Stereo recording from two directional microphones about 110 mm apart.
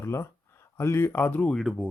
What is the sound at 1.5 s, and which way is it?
Speech, centre (ahead or behind).